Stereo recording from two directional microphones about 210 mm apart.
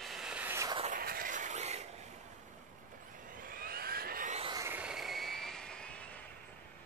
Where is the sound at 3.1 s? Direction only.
40° right (ahead or behind).